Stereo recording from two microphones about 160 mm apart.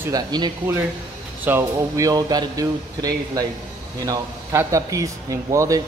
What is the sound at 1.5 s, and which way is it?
Speech, 20° right (ahead or behind).